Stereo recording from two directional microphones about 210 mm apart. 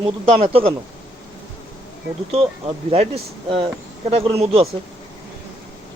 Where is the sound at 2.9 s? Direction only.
30° right (ahead or behind).